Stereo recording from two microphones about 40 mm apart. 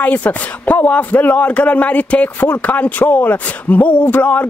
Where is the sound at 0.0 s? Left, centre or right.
Left.